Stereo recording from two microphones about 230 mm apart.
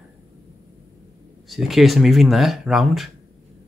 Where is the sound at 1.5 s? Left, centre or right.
Centre.